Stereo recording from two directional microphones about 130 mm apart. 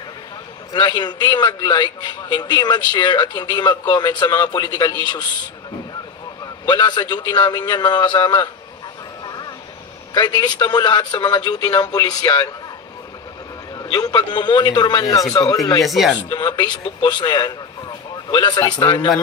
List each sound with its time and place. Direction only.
0.7 s a man's voice: 35° left (ahead or behind)
6.4 s a man's voice: 35° left (ahead or behind)
9.2 s vehicle: 35° left (ahead or behind)
10.1 s a man's voice: 35° left (ahead or behind)
13.7 s a man's voice: 30° left (ahead or behind)
15.8 s speech: centre (ahead or behind)
16.3 s a man's voice: 35° left (ahead or behind)